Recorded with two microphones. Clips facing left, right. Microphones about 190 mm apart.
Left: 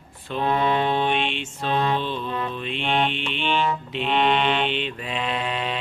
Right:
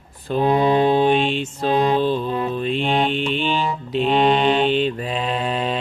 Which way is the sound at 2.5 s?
40° right (ahead or behind).